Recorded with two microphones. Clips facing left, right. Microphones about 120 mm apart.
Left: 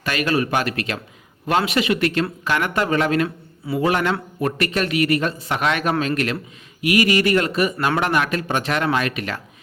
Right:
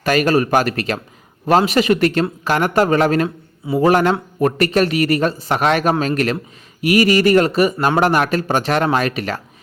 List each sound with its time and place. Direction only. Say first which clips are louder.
0.0 s speech: right 6 dB; 40° right (ahead or behind)